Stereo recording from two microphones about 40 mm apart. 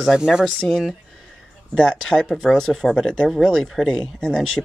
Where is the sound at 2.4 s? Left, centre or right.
Centre.